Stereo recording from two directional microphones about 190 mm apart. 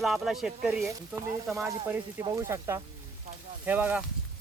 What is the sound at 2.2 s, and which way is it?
Speech, 15° right (ahead or behind).